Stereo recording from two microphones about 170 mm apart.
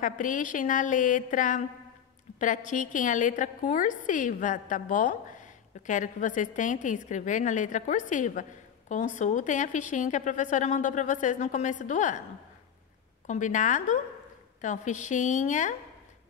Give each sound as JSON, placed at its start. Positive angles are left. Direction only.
{"t": 0.0, "sound": "a woman's voice", "side_deg": 50}
{"t": 13.3, "sound": "a woman's voice", "side_deg": 50}